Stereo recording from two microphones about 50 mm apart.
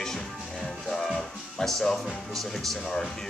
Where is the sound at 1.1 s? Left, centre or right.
Centre.